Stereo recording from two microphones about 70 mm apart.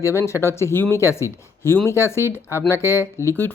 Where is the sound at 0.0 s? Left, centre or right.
Left.